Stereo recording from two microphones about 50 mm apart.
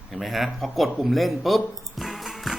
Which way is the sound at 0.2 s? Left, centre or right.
Centre.